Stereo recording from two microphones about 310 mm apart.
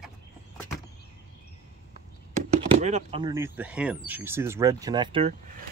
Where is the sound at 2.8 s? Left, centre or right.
Centre.